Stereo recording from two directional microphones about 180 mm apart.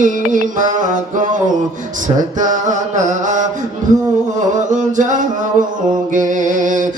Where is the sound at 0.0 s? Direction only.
45° right (ahead or behind).